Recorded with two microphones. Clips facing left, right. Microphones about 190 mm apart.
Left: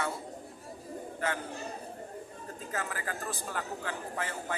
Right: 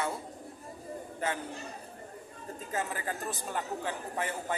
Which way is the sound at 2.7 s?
20° right (ahead or behind).